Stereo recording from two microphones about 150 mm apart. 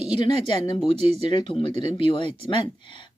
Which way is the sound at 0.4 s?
35° left (ahead or behind).